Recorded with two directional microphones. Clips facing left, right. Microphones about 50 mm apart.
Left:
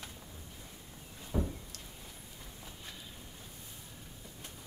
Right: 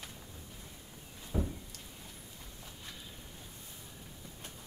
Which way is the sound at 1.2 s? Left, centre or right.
Centre.